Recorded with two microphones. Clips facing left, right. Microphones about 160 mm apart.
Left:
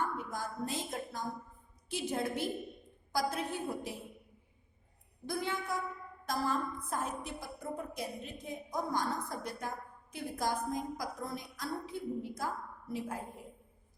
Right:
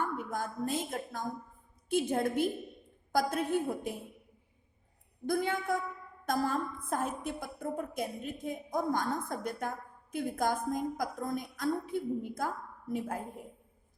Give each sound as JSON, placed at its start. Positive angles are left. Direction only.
{"t": 0.2, "sound": "a woman's voice", "side_deg": -50}
{"t": 5.2, "sound": "a woman's voice", "side_deg": -50}